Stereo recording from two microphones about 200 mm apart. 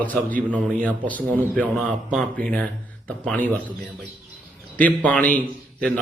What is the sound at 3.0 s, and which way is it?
Speech, 5° left (ahead or behind).